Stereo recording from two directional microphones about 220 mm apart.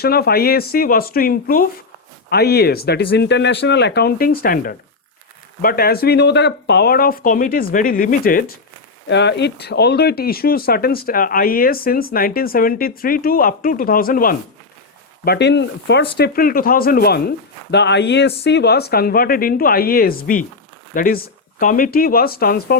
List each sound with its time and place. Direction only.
0.0 s speech: 45° left (ahead or behind)
9.0 s speech: 50° left (ahead or behind)